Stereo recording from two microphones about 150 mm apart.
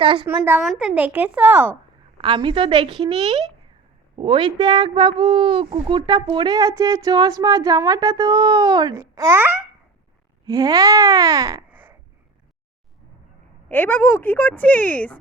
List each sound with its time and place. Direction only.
0.0 s a woman's voice: 35° right (ahead or behind)
0.8 s a child's voice: 10° right (ahead or behind)
2.1 s a woman's voice: 30° right (ahead or behind)
11.7 s a sound: 15° right (ahead or behind)
13.7 s a woman's voice: 10° left (ahead or behind)